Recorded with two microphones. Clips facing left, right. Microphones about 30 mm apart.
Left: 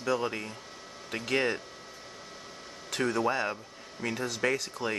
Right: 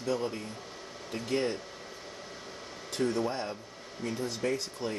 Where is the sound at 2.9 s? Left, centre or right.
Left.